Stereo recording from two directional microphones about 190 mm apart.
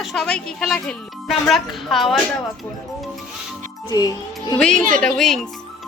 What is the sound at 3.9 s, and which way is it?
Speech, 20° left (ahead or behind).